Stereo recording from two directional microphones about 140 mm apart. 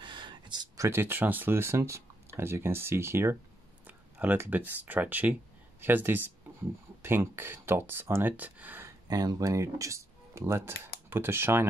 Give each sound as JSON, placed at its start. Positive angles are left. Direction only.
{"t": 0.0, "sound": "speech", "side_deg": -35}
{"t": 9.0, "sound": "speech", "side_deg": -30}